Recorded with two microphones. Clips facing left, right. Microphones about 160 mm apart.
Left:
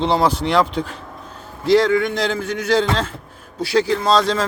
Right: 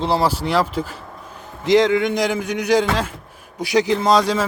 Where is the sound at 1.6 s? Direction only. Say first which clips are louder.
Even; 15° right (ahead or behind).